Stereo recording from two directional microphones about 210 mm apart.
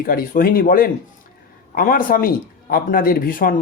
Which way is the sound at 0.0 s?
45° left (ahead or behind).